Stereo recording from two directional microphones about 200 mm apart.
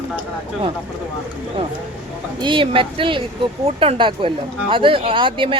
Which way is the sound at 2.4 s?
25° right (ahead or behind).